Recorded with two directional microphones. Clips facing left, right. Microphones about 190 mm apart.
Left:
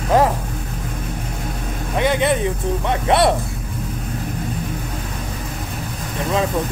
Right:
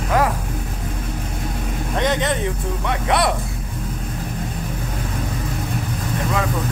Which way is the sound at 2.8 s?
25° left (ahead or behind).